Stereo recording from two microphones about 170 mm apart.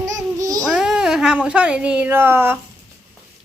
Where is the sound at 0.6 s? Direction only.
Centre (ahead or behind).